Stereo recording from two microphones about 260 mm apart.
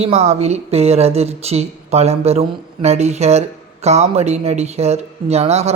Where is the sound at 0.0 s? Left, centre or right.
Right.